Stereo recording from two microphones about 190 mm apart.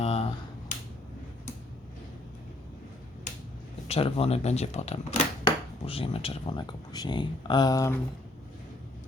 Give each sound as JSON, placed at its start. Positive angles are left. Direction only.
{"t": 0.0, "sound": "finger snapping", "side_deg": 30}
{"t": 3.8, "sound": "speech", "side_deg": 30}